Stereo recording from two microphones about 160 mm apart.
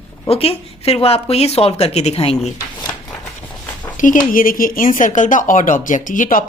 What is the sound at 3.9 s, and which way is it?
Speech, 55° left (ahead or behind).